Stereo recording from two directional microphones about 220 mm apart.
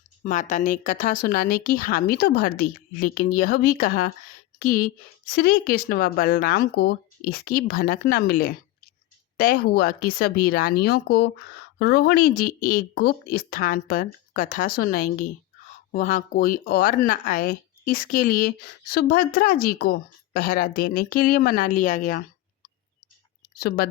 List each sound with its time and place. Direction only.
0.3 s a woman's voice: 35° left (ahead or behind)
23.6 s a woman's voice: 45° left (ahead or behind)